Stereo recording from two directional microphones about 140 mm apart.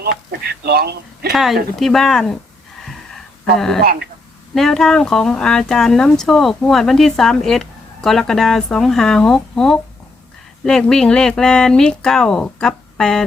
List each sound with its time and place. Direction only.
1.3 s speech: centre (ahead or behind)
2.8 s a sound: centre (ahead or behind)
4.5 s speech: 5° left (ahead or behind)